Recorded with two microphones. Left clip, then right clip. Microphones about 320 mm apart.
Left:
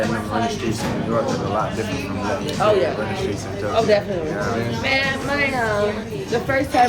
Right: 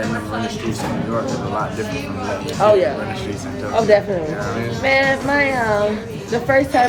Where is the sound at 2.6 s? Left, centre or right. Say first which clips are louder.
Right 4 dB; right.